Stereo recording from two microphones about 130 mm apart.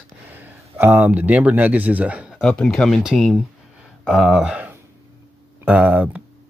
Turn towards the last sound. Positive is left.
turn(degrees=-10)  # may be behind; listen again after turning